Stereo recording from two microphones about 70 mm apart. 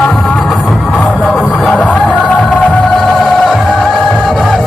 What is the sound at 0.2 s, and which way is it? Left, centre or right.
Music, centre.